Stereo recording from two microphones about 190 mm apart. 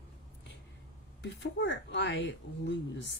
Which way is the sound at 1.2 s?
70° left (ahead or behind).